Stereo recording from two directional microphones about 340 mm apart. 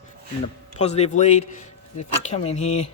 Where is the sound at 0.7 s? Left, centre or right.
Centre.